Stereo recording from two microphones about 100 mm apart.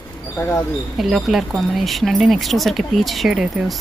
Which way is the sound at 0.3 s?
25° left (ahead or behind).